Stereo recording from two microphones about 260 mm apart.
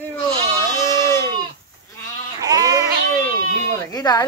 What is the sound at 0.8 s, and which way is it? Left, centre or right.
Goat, centre.